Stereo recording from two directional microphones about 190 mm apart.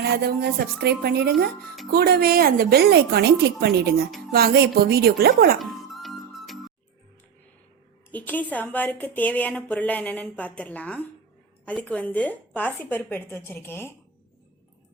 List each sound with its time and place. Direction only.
0.0 s a woman's voice: 55° right (ahead or behind)
5.5 s music: centre (ahead or behind)
8.1 s a woman's voice: 10° left (ahead or behind)